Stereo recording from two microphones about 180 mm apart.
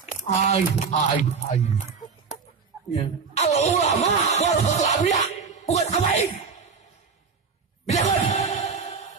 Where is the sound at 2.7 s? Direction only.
20° right (ahead or behind).